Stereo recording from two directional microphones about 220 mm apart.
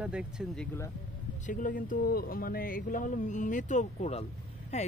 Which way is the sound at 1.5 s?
35° left (ahead or behind).